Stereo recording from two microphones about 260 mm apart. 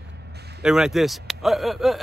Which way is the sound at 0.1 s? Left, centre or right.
Right.